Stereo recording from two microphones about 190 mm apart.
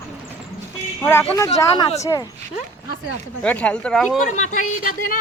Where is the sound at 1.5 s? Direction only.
25° left (ahead or behind).